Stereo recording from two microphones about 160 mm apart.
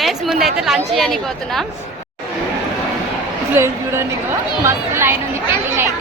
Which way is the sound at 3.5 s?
15° right (ahead or behind).